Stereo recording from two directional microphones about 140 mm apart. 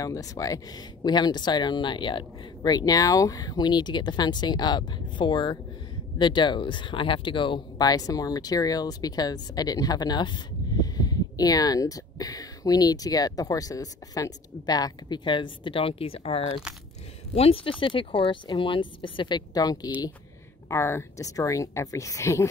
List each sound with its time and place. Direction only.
0.0 s speech: 25° left (ahead or behind)